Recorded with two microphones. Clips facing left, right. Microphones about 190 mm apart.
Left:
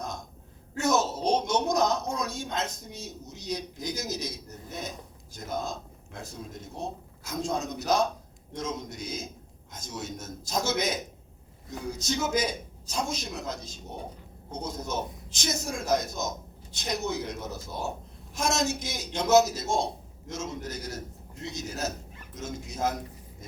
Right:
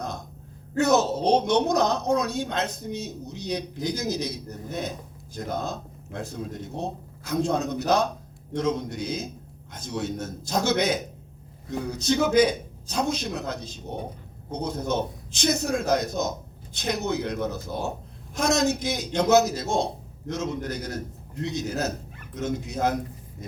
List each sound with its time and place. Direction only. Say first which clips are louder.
0.8 s speech: right 5 dB; 60° right (ahead or behind)